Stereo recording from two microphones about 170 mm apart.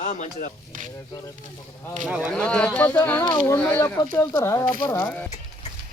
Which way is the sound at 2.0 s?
5° right (ahead or behind).